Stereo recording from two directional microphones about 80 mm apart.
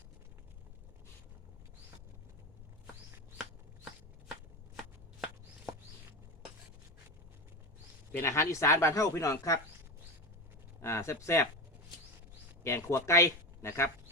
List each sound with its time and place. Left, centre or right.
8.1 s speech: left
10.8 s speech: left
12.6 s speech: left